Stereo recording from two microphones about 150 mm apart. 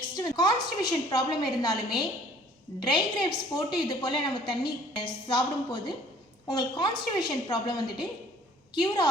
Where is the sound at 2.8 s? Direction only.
30° left (ahead or behind).